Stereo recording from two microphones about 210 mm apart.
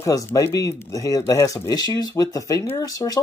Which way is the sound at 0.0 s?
15° left (ahead or behind).